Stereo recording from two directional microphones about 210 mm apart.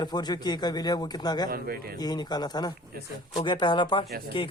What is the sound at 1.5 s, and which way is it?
Speech, 45° right (ahead or behind).